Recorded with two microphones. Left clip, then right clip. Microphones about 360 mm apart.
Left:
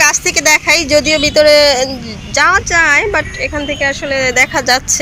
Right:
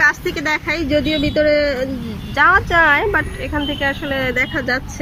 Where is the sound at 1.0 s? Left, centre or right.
Left.